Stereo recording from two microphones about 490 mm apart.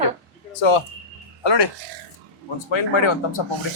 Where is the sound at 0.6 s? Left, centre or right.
Left.